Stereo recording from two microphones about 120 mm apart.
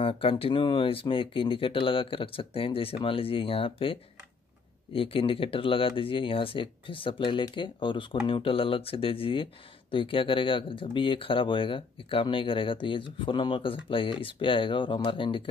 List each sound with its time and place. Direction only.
0.0 s speech: 50° left (ahead or behind)